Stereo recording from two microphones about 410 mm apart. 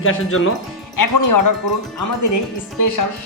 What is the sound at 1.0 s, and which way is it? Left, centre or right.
Speech, left.